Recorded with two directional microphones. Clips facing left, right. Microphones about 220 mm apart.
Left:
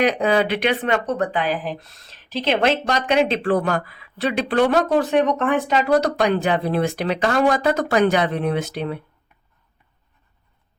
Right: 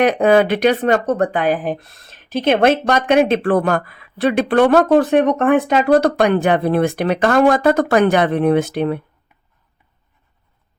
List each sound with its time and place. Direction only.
0.0 s a woman's voice: 55° right (ahead or behind)